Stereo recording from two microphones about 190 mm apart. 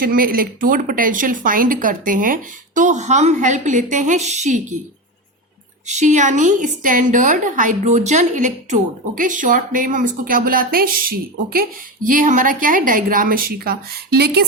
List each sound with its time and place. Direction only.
0.0 s a woman's voice: 50° right (ahead or behind)
5.8 s a woman's voice: 40° right (ahead or behind); by 14.4 s 55° right (ahead or behind)